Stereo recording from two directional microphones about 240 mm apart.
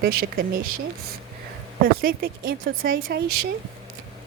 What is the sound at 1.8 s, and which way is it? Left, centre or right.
Speech, right.